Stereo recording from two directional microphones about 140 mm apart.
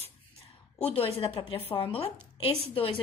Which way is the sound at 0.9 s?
40° left (ahead or behind).